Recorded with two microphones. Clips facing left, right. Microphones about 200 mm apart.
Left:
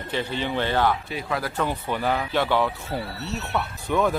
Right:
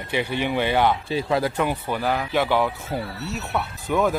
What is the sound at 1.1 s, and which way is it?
Speech, 25° right (ahead or behind).